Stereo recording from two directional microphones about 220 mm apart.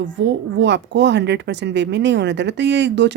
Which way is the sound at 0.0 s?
55° right (ahead or behind).